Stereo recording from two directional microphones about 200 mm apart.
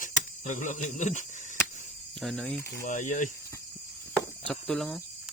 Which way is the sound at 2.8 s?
40° left (ahead or behind).